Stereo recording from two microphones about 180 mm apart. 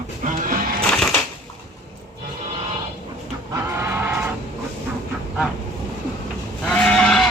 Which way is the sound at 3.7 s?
15° right (ahead or behind).